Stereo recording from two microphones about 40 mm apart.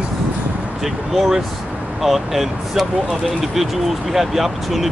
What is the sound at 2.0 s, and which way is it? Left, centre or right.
Speech, centre.